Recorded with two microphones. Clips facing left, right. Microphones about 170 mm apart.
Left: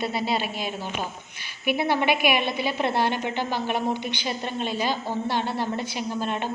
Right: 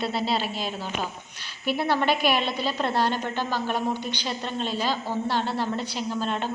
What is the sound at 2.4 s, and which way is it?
Speech, 60° left (ahead or behind).